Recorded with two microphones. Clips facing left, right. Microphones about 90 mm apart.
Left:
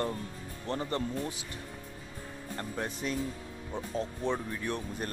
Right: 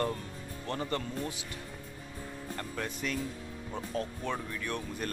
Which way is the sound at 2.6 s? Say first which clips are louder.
Left 2 dB; 30° left (ahead or behind).